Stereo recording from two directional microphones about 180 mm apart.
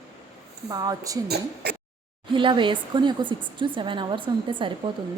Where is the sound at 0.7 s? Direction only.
20° right (ahead or behind).